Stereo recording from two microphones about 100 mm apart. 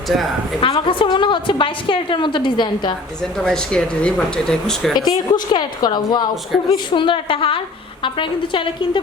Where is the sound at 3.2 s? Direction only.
5° left (ahead or behind).